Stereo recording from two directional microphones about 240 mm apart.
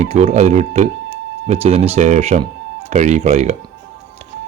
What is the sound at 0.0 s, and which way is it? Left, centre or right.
Speech, right.